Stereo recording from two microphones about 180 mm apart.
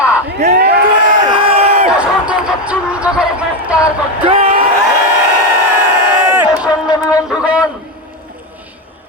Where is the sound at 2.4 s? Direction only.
5° right (ahead or behind).